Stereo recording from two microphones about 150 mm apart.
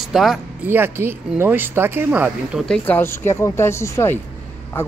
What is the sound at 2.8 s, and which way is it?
Speech, 15° left (ahead or behind).